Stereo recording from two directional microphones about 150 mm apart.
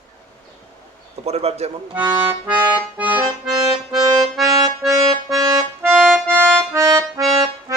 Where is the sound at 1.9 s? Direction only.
15° right (ahead or behind).